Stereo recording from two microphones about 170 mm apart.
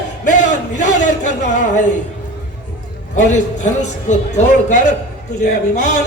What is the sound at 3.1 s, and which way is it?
A man's voice, 45° left (ahead or behind).